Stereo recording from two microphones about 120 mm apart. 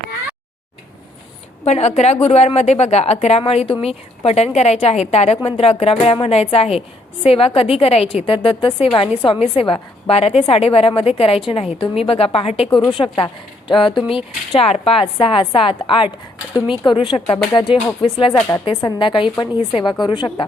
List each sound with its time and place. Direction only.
1.6 s a woman's voice: 65° left (ahead or behind); by 18.3 s 40° left (ahead or behind)
18.3 s a woman's voice: 15° left (ahead or behind)
18.6 s a woman's voice: 35° left (ahead or behind)